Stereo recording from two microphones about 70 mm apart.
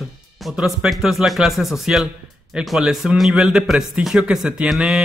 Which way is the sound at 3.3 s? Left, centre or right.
Centre.